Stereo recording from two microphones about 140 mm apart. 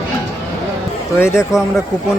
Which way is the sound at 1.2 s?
20° left (ahead or behind).